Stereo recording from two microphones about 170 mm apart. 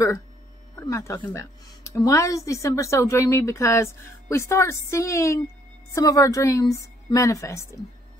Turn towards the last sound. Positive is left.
turn(degrees=15)  # may be behind; listen again after turning